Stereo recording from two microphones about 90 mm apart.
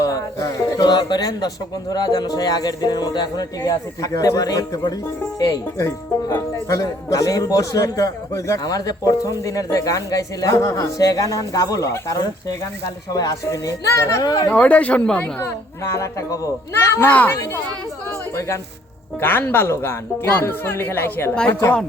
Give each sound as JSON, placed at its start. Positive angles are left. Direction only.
{"t": 0.0, "sound": "music", "side_deg": 40}
{"t": 1.9, "sound": "a man's voice", "side_deg": 45}
{"t": 14.4, "sound": "speech", "side_deg": 15}
{"t": 15.4, "sound": "a man's voice", "side_deg": 35}
{"t": 18.3, "sound": "a man's voice", "side_deg": 35}
{"t": 19.2, "sound": "a woman's voice", "side_deg": 25}